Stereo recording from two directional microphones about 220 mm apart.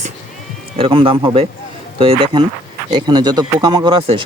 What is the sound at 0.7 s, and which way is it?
Speech, 25° right (ahead or behind).